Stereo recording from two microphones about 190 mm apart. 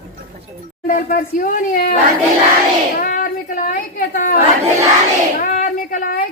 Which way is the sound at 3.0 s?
45° left (ahead or behind).